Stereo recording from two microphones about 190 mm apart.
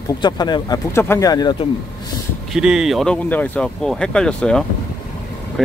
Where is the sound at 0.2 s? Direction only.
20° left (ahead or behind).